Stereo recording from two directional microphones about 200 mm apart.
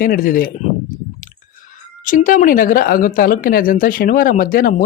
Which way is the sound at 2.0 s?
40° left (ahead or behind).